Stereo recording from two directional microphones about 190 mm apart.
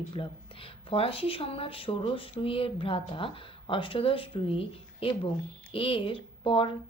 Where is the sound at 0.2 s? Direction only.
30° left (ahead or behind).